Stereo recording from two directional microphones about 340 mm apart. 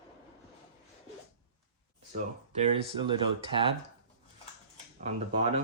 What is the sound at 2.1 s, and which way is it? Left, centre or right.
Speech, centre.